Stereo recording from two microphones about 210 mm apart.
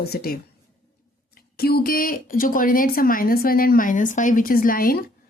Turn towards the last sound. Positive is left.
turn(degrees=45)  # may be behind; listen again after turning